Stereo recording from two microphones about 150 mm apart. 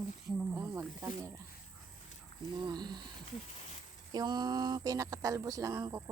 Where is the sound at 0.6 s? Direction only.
20° right (ahead or behind).